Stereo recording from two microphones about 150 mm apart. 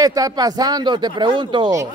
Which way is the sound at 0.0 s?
25° right (ahead or behind).